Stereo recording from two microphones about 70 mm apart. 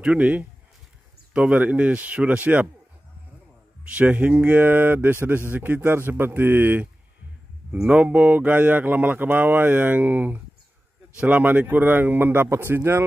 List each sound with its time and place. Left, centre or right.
0.0 s speech: centre
3.8 s speech: right
7.8 s speech: centre; by 13.0 s right